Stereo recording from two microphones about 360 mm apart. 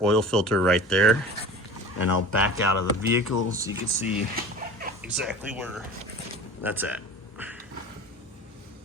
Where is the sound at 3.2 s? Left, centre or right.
Left.